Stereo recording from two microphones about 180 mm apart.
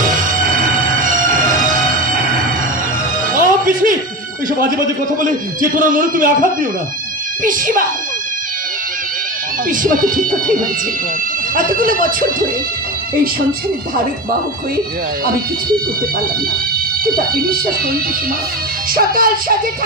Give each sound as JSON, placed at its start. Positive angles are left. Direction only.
{"t": 0.9, "sound": "music", "side_deg": -50}
{"t": 3.3, "sound": "music", "side_deg": -50}
{"t": 5.7, "sound": "a man's voice", "side_deg": -50}
{"t": 9.6, "sound": "a man's voice", "side_deg": -50}
{"t": 17.2, "sound": "speech", "side_deg": -55}
{"t": 18.9, "sound": "a man's voice", "side_deg": -50}